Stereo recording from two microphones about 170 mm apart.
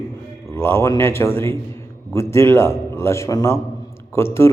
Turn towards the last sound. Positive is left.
turn(degrees=15)  # may be behind; listen again after turning